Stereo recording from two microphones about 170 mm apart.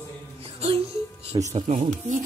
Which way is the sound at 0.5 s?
35° right (ahead or behind).